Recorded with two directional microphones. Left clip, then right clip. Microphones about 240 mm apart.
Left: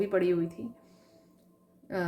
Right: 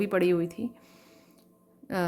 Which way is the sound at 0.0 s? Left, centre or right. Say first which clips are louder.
Right 2 dB; right.